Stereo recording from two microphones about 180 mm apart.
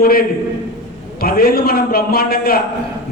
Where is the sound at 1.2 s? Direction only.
55° left (ahead or behind).